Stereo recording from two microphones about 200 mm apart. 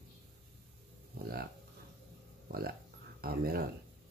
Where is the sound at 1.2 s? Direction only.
50° right (ahead or behind).